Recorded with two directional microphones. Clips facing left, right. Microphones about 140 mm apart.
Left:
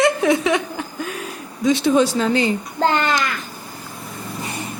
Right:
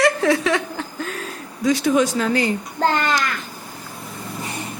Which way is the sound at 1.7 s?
30° left (ahead or behind).